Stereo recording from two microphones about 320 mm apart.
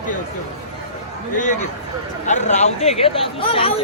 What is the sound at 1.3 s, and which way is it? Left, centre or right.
Speech, left.